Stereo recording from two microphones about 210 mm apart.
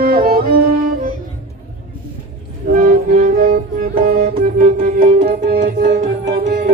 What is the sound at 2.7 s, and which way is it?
Music, 40° right (ahead or behind).